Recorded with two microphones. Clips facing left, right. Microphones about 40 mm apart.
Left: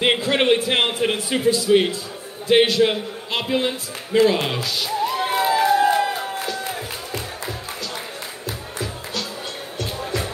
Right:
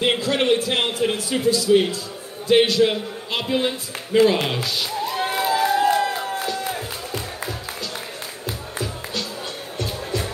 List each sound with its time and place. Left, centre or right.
0.0 s a man's voice: left
2.4 s a man's voice: centre
5.1 s crowd: centre
8.5 s music: centre